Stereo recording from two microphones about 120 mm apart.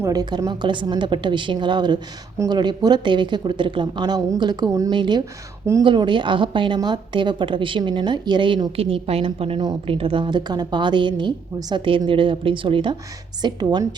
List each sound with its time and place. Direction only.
0.0 s a woman's voice: 30° right (ahead or behind)
8.7 s a woman's voice: 55° right (ahead or behind); by 13.8 s 35° right (ahead or behind)